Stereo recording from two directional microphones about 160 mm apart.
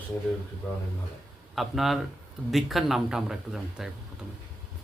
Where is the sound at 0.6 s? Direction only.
10° left (ahead or behind).